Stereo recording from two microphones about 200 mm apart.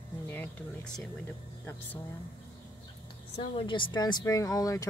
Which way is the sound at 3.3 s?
25° left (ahead or behind).